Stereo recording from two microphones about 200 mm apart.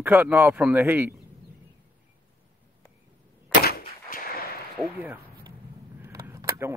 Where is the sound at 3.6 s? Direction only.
50° left (ahead or behind).